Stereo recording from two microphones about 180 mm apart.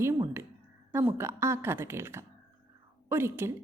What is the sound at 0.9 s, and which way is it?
A woman's voice, 15° right (ahead or behind).